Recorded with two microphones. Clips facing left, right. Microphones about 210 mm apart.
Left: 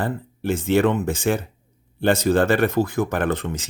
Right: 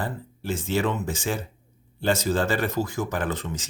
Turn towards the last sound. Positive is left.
turn(degrees=60)  # may be behind; listen again after turning